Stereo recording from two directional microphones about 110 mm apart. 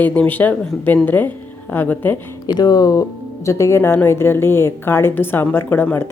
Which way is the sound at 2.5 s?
40° left (ahead or behind).